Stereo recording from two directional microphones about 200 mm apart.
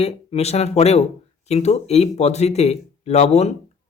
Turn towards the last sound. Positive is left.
turn(degrees=35)  # may be behind; listen again after turning